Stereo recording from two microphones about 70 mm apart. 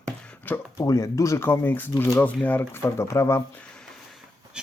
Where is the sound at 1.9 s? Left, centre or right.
Left.